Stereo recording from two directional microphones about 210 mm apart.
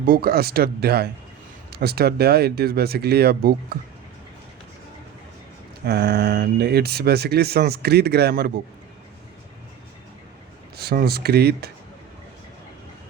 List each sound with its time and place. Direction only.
0.0 s speech: 45° right (ahead or behind)
5.8 s speech: 50° right (ahead or behind)
10.8 s speech: 50° right (ahead or behind)